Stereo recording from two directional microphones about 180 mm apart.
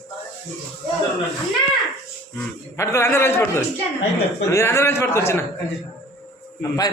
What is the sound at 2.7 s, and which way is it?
A man's voice, 15° left (ahead or behind).